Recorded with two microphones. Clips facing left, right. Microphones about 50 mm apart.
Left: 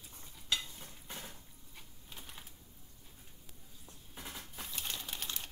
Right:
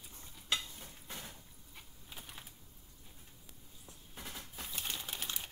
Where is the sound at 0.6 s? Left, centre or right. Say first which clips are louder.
Even; centre.